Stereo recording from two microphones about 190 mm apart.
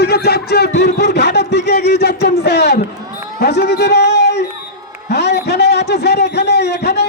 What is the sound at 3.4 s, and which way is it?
A man's voice, 60° left (ahead or behind).